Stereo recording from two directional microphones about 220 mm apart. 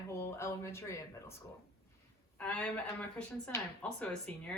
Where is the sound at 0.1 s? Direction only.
10° left (ahead or behind).